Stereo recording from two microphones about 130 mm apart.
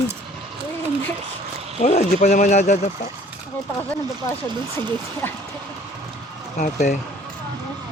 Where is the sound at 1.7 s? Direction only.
60° left (ahead or behind).